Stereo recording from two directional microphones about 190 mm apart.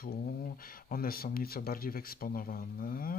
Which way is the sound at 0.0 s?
50° left (ahead or behind).